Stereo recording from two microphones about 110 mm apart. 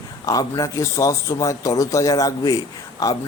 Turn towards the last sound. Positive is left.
turn(degrees=30)  # may be behind; listen again after turning